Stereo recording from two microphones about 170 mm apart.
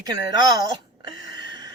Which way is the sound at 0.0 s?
20° right (ahead or behind).